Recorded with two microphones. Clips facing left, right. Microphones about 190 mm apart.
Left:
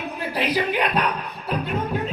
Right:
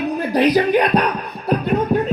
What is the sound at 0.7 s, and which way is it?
Music, 40° right (ahead or behind).